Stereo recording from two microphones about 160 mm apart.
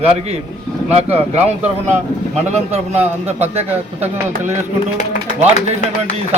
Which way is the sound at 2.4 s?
40° right (ahead or behind).